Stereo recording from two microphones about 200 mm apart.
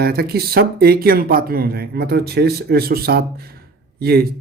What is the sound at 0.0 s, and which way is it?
A woman's voice, 50° right (ahead or behind).